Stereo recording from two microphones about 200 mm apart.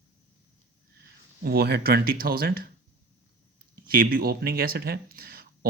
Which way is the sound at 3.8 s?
45° right (ahead or behind).